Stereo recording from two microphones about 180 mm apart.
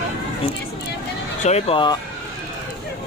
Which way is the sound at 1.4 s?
35° left (ahead or behind).